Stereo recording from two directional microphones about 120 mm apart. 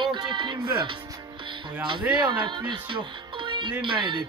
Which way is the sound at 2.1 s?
40° right (ahead or behind).